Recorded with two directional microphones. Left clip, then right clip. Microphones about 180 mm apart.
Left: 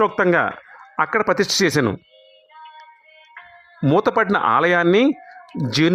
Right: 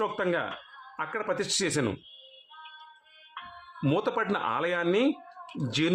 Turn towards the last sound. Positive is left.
turn(degrees=50)  # may be behind; listen again after turning